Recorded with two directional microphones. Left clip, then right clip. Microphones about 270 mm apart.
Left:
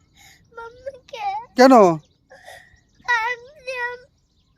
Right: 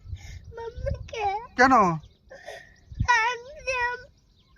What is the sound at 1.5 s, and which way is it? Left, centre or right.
Speech, left.